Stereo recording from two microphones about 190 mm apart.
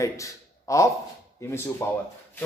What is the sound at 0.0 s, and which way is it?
A man's voice, 15° left (ahead or behind).